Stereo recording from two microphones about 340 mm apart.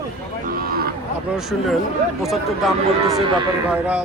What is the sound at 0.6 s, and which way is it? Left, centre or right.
Cattle, right.